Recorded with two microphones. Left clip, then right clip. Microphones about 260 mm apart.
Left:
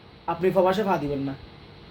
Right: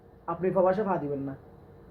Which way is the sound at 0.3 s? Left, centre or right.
Centre.